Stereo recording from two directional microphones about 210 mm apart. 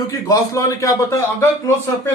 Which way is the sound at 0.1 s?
15° left (ahead or behind).